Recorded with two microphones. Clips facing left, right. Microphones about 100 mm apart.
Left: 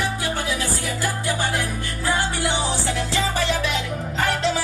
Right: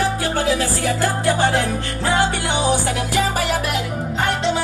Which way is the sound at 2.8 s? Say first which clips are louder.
Right 3 dB; 55° right (ahead or behind).